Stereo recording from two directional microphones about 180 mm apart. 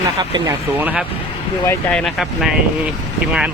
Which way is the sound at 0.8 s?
5° right (ahead or behind).